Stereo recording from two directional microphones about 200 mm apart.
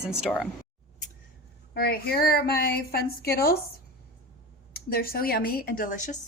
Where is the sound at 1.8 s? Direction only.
50° left (ahead or behind).